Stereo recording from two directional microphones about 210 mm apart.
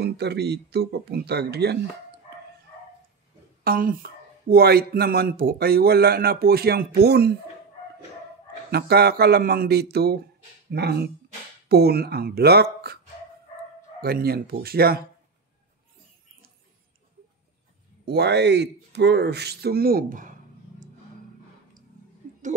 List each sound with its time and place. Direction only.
0.0 s speech: 50° right (ahead or behind)
3.6 s speech: 45° right (ahead or behind)
8.7 s speech: 50° right (ahead or behind)
14.0 s speech: 45° right (ahead or behind)
18.0 s speech: 50° right (ahead or behind)